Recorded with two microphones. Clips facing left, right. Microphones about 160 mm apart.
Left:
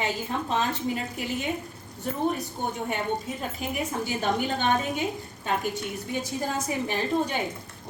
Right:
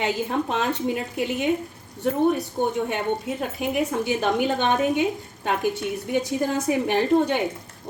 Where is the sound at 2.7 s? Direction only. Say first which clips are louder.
Right 4 dB; 70° right (ahead or behind).